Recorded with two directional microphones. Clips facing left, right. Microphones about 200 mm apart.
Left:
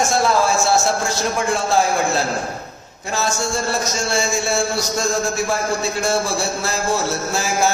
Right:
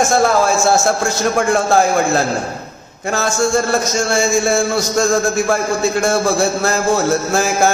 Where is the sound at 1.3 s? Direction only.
50° right (ahead or behind).